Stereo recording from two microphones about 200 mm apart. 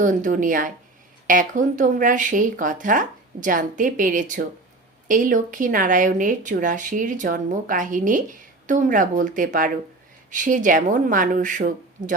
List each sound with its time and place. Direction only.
0.0 s speech: 40° right (ahead or behind)